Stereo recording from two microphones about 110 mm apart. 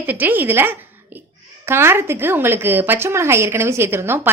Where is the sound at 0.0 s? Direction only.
15° right (ahead or behind).